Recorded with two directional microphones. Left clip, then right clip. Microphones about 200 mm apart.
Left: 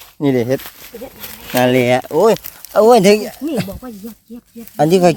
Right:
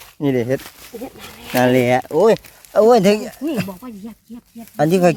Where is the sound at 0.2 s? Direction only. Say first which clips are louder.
Left 3 dB; 20° left (ahead or behind).